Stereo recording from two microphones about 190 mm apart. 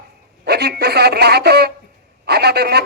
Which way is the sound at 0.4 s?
60° right (ahead or behind).